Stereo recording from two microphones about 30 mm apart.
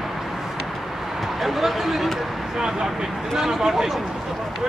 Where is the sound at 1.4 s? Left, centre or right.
Centre.